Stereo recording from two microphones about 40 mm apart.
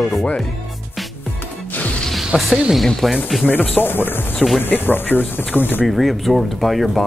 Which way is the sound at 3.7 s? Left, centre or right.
Left.